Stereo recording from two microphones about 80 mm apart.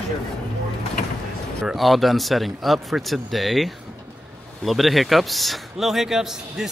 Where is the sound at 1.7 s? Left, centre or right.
Centre.